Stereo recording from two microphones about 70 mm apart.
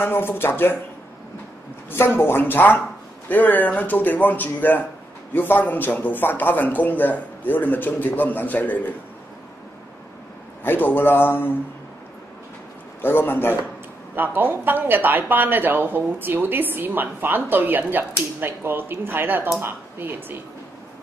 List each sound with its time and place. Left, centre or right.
0.0 s speech: left
1.9 s speech: left
10.6 s speech: left
13.0 s speech: left
14.1 s speech: right